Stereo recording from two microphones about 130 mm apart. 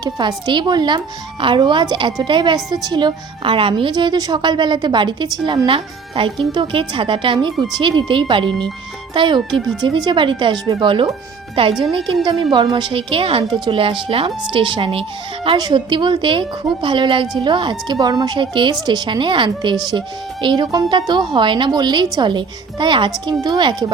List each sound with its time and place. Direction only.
0.0 s a woman's voice: 35° right (ahead or behind)